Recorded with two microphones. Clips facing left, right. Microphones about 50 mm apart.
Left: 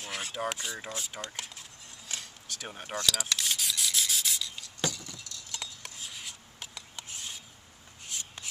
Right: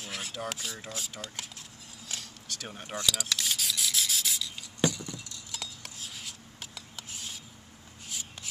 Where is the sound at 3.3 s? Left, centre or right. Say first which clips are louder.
Even; centre.